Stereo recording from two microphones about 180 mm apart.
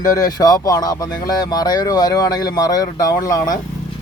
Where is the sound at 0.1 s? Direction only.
20° left (ahead or behind).